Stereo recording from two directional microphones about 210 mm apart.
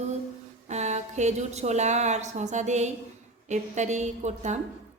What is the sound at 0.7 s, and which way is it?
A woman's voice, 35° right (ahead or behind).